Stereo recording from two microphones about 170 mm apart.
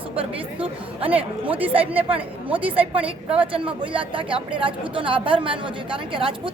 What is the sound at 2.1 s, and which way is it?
Speech, 30° right (ahead or behind).